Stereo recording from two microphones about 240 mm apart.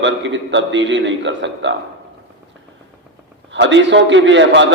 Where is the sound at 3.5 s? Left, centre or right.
Right.